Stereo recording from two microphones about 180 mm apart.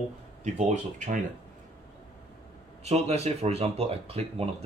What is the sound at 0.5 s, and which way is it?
Speech, 40° right (ahead or behind).